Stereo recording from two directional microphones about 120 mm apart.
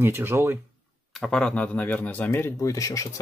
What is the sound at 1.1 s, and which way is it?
Speech, 5° left (ahead or behind).